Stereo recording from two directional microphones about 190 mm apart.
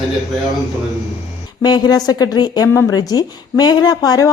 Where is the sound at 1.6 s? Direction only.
20° left (ahead or behind).